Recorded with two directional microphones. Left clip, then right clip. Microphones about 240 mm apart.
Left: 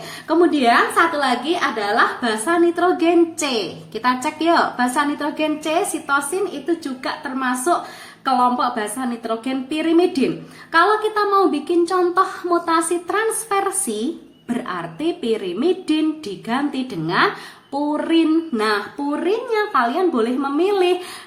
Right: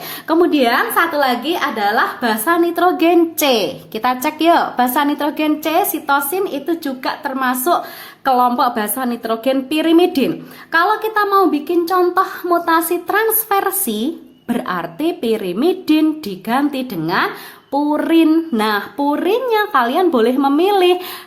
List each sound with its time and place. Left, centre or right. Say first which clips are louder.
0.3 s a woman's voice: right 2 dB; right